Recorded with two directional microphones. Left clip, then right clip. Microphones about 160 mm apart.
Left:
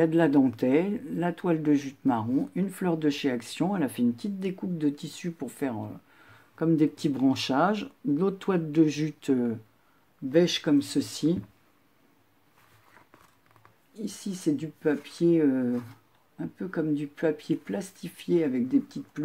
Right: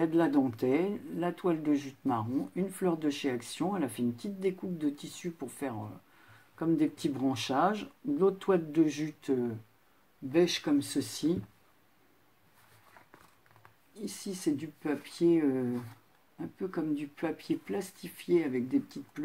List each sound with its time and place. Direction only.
0.0 s speech: 30° left (ahead or behind)
10.6 s speech: 30° left (ahead or behind)
14.0 s speech: 25° left (ahead or behind)